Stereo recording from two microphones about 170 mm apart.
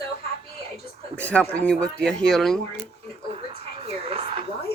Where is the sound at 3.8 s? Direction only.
35° right (ahead or behind).